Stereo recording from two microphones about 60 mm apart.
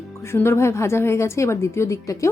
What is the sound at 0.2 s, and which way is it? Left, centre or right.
A woman's voice, left.